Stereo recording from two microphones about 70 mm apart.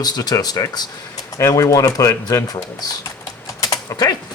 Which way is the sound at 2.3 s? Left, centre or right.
Left.